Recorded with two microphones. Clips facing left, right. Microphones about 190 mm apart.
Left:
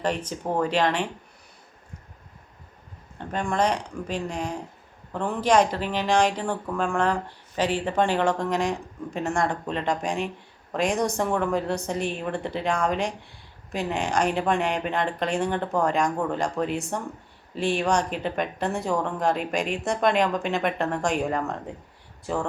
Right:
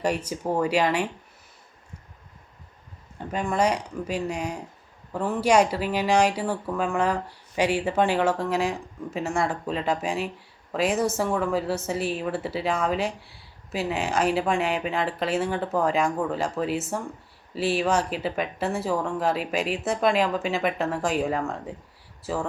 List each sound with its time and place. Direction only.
0.0 s speech: 10° right (ahead or behind)
3.2 s speech: 5° right (ahead or behind)